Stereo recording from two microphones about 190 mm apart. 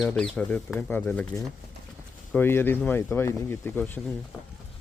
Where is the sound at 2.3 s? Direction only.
10° left (ahead or behind).